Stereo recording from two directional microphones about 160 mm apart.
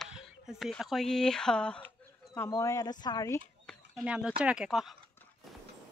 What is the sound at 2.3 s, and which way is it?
Speech, 20° left (ahead or behind).